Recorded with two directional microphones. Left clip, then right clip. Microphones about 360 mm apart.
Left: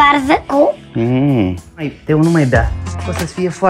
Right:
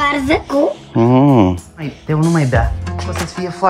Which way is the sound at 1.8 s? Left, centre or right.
Centre.